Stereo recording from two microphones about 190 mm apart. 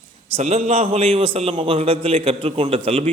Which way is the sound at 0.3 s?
35° right (ahead or behind).